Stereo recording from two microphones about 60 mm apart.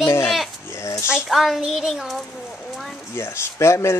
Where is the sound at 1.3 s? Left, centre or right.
Centre.